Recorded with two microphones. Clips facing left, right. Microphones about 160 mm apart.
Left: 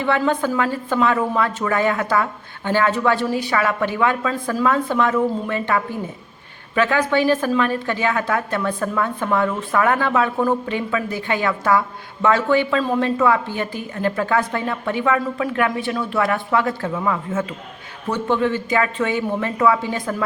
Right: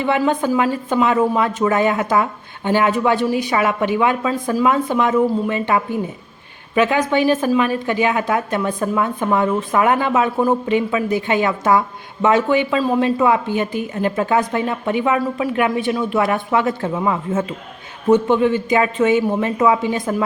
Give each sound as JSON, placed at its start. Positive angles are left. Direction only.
{"t": 0.0, "sound": "a woman's voice", "side_deg": -15}